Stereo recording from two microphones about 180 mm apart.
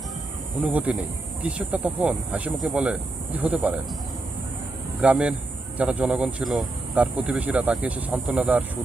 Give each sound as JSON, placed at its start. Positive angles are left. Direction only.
{"t": 0.6, "sound": "speech", "side_deg": -10}
{"t": 4.9, "sound": "speech", "side_deg": -5}